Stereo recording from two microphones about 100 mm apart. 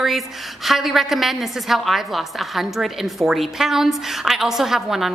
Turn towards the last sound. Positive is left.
turn(degrees=-5)  # may be behind; listen again after turning